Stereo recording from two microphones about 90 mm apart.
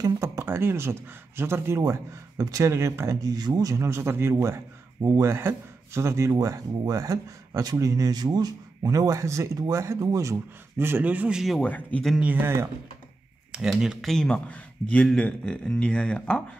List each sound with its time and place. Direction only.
0.0 s speech: 30° right (ahead or behind); by 11.4 s 15° right (ahead or behind)
11.6 s speech: 15° left (ahead or behind)
12.2 s speech: 20° right (ahead or behind)
13.5 s speech: 5° right (ahead or behind)
14.1 s speech: 10° left (ahead or behind)